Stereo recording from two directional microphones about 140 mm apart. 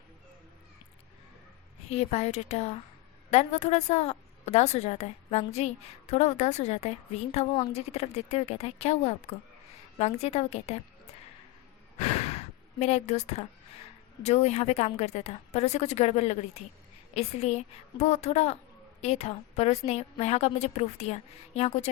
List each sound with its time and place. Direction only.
1.9 s a woman's voice: 50° left (ahead or behind)
11.9 s gasp: 50° left (ahead or behind)
14.3 s a woman's voice: 50° left (ahead or behind)